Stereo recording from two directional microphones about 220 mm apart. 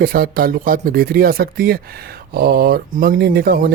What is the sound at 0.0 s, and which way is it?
Speech, 40° right (ahead or behind).